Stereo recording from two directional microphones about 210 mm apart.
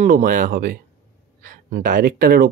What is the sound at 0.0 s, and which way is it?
Speech, 40° right (ahead or behind).